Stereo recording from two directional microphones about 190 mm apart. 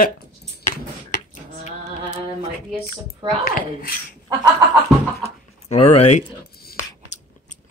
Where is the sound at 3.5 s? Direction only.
50° left (ahead or behind).